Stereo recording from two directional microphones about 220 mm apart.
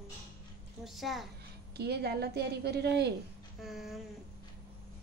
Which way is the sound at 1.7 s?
45° right (ahead or behind).